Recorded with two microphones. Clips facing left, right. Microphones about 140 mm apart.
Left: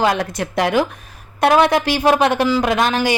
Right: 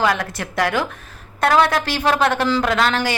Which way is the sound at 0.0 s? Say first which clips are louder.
Left 2 dB; 20° left (ahead or behind).